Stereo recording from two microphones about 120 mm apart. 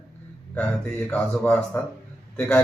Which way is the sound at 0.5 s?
10° left (ahead or behind).